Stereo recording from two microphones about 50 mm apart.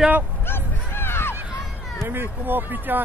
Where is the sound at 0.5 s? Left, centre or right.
Left.